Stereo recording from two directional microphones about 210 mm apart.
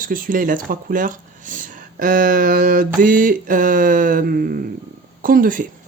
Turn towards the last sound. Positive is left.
turn(degrees=-40)  # may be behind; listen again after turning